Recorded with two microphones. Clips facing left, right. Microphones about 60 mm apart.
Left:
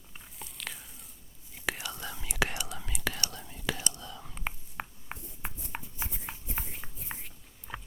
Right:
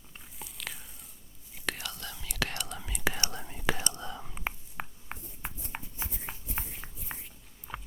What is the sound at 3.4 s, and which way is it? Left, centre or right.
Whispering, right.